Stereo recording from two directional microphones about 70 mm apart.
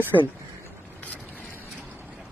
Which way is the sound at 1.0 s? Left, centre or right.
Left.